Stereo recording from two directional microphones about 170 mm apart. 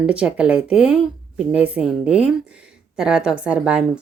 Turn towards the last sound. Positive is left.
turn(degrees=-5)  # may be behind; listen again after turning